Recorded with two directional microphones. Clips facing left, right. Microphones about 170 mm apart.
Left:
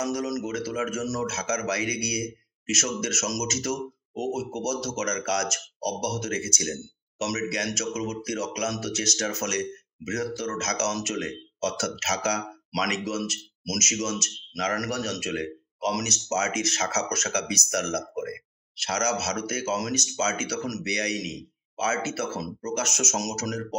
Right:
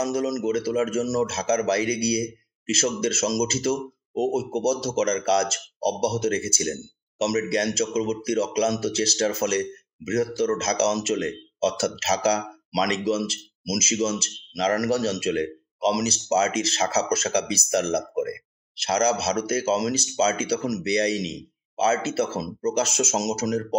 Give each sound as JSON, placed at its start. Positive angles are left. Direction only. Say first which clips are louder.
{"t": 0.0, "sound": "a man's voice", "louder": "right 4 dB", "side_deg": -30}